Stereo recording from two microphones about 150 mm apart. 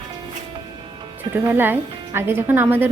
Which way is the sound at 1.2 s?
15° right (ahead or behind).